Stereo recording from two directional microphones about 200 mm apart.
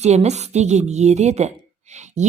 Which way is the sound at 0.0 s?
35° right (ahead or behind).